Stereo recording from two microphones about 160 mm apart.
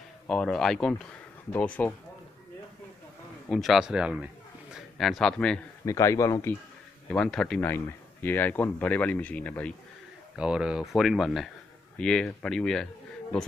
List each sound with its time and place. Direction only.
0.3 s speech: 5° left (ahead or behind)
3.4 s a man's voice: centre (ahead or behind)
5.9 s speech: 20° left (ahead or behind)
7.1 s speech: 5° left (ahead or behind)
10.3 s speech: 5° right (ahead or behind)